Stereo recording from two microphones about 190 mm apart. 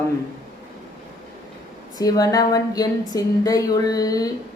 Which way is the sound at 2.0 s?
20° left (ahead or behind).